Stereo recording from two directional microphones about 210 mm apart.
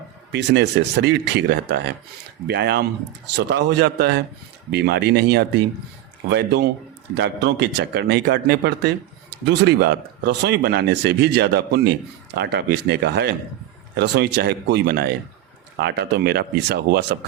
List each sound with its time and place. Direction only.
0.3 s speech: 55° right (ahead or behind)